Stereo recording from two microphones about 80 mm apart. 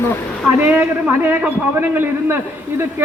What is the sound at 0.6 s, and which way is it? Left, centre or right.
A man's voice, right.